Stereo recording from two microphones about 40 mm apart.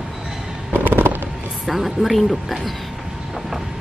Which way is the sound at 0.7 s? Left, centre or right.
Right.